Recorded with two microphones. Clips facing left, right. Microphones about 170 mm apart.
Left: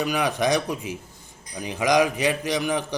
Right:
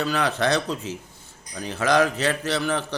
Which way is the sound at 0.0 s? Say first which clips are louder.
Even; 15° left (ahead or behind).